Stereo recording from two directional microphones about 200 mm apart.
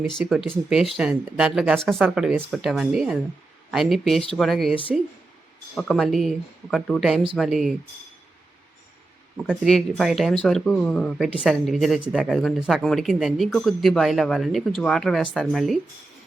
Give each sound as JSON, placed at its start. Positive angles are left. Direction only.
{"t": 0.2, "sound": "speech", "side_deg": 0}
{"t": 4.7, "sound": "speech", "side_deg": 25}
{"t": 5.7, "sound": "speech", "side_deg": 0}
{"t": 9.4, "sound": "speech", "side_deg": 0}